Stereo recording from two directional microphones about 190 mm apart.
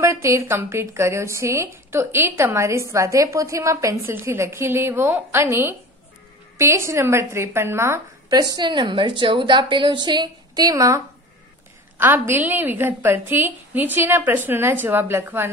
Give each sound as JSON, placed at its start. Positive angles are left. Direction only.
{"t": 0.0, "sound": "a woman's voice", "side_deg": -15}
{"t": 12.0, "sound": "speech", "side_deg": -10}